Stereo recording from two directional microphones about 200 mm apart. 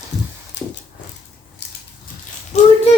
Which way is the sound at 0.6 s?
60° left (ahead or behind).